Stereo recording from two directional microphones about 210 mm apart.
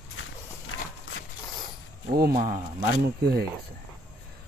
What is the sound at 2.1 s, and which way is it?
Speech, 45° right (ahead or behind).